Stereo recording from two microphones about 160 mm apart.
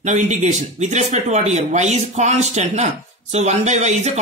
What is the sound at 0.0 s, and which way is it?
Speech, 45° right (ahead or behind).